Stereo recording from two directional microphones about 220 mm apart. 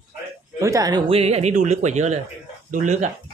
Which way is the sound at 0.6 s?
15° right (ahead or behind).